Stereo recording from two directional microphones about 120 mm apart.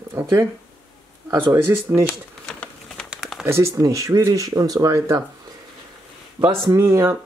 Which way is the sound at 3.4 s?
20° right (ahead or behind).